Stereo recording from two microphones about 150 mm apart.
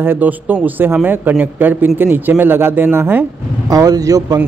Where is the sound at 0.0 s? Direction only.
15° right (ahead or behind).